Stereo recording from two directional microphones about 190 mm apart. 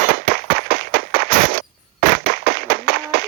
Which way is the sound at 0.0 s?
50° right (ahead or behind).